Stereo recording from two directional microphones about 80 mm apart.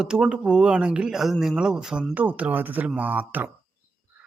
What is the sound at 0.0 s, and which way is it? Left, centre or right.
Speech, centre.